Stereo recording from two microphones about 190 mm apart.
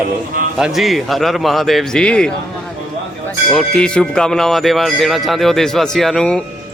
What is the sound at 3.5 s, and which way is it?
Speech, 5° left (ahead or behind).